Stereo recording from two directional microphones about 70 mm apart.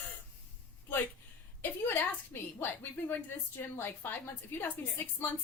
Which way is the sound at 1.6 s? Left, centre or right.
Left.